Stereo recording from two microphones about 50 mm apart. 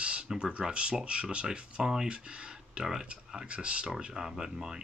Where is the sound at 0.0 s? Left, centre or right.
Right.